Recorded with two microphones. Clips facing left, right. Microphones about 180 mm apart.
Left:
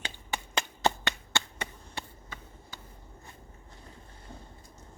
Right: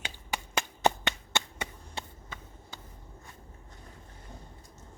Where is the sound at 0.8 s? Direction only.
20° right (ahead or behind).